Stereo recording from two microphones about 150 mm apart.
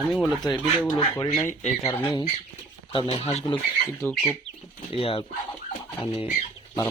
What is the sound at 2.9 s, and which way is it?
Speech, 40° left (ahead or behind).